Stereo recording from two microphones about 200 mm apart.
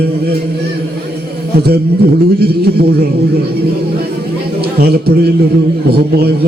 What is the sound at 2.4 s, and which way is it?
Speech, 50° right (ahead or behind).